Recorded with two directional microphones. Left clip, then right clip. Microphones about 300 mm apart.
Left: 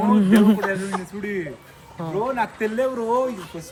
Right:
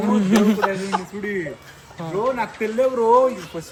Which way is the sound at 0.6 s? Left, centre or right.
Right.